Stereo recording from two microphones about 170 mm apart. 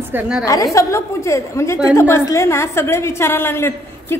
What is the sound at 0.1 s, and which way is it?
Speech, 5° right (ahead or behind).